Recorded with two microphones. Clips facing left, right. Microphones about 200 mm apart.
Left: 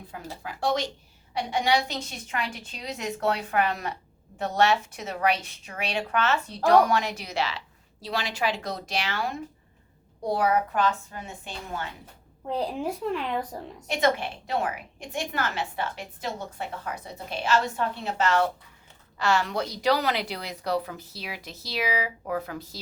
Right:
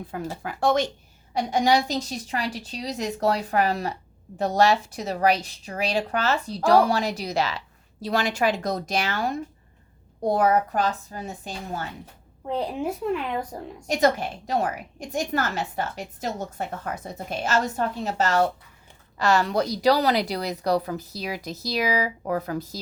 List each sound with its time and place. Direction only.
0.1 s a woman's voice: 50° right (ahead or behind)
12.5 s a child's voice: centre (ahead or behind)
13.8 s a woman's voice: 40° right (ahead or behind)